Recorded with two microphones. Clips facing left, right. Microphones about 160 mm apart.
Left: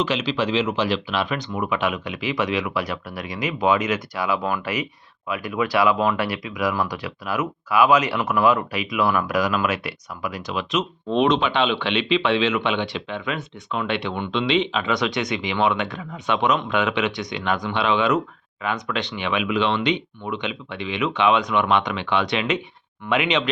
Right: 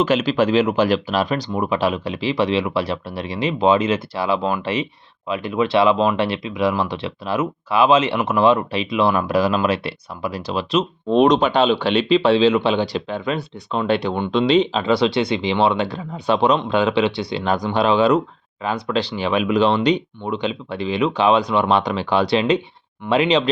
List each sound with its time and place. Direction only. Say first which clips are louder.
0.0 s speech: right 6 dB; 50° right (ahead or behind)